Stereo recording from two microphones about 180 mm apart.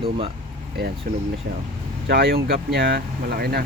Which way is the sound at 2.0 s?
65° right (ahead or behind).